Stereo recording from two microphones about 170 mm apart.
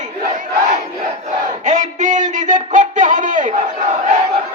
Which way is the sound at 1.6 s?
45° right (ahead or behind).